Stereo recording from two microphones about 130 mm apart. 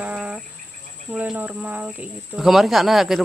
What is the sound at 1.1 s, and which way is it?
Speech, 10° right (ahead or behind).